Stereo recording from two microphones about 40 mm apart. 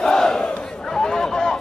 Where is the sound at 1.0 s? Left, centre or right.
Centre.